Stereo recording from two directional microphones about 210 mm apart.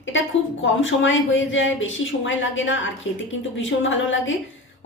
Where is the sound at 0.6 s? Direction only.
65° left (ahead or behind).